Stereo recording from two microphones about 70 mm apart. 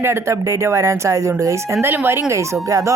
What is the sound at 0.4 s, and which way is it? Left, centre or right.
Speech, right.